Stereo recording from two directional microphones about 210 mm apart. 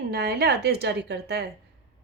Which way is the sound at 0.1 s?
50° right (ahead or behind).